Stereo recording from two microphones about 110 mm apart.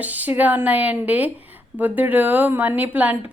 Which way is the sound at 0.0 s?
15° right (ahead or behind).